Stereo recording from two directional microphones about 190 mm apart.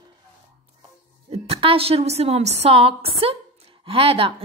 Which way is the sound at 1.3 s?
30° right (ahead or behind).